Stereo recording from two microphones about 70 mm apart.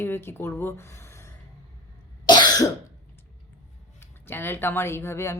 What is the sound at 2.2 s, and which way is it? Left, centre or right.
Cough, left.